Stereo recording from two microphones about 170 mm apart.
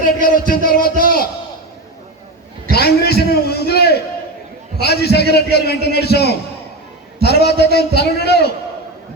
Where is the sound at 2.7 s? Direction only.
65° left (ahead or behind).